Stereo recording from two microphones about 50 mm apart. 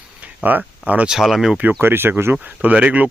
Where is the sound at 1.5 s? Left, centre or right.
Right.